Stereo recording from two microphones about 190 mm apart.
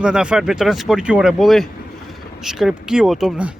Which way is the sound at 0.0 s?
5° right (ahead or behind).